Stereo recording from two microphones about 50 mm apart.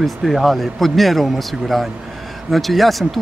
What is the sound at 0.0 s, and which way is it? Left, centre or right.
Speech, centre.